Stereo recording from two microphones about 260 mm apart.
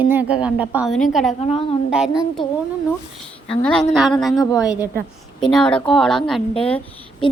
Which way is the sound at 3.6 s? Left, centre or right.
Centre.